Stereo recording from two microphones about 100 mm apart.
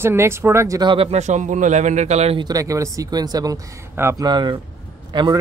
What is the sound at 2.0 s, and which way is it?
Speech, 90° right.